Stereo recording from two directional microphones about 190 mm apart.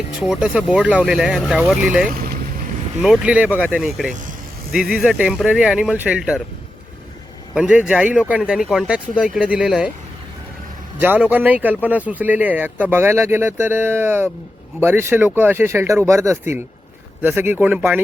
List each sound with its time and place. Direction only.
0.2 s speech: 5° right (ahead or behind)
2.0 s vehicle: 50° right (ahead or behind)
3.0 s speech: 5° right (ahead or behind)
7.5 s speech: 5° right (ahead or behind)
11.0 s speech: 10° right (ahead or behind)